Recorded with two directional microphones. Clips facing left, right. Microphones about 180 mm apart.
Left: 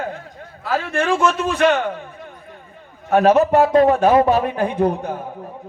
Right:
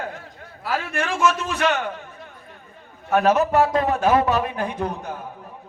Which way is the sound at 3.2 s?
60° left (ahead or behind).